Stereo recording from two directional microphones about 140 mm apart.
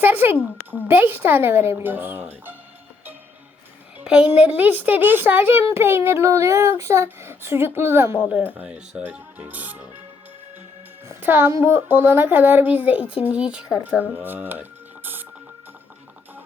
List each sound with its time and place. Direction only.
0.0 s speech: 15° right (ahead or behind)
4.0 s speech: 5° right (ahead or behind)
11.1 s speech: 15° right (ahead or behind)